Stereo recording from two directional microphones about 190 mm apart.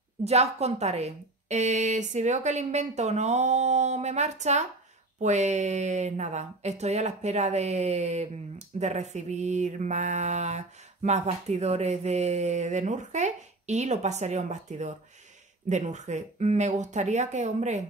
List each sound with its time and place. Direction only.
0.2 s speech: 35° right (ahead or behind)